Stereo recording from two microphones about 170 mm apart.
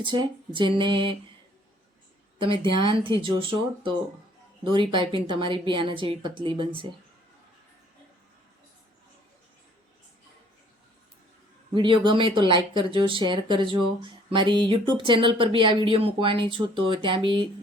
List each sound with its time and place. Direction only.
0.0 s speech: 30° right (ahead or behind)
2.4 s speech: 30° right (ahead or behind)
11.7 s speech: 30° right (ahead or behind)